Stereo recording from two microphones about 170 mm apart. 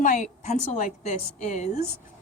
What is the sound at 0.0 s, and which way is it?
A woman's voice, 50° left (ahead or behind).